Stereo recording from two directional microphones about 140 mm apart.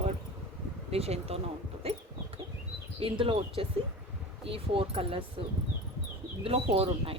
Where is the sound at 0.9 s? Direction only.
45° right (ahead or behind).